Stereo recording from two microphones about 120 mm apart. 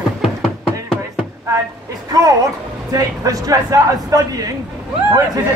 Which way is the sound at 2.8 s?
30° right (ahead or behind).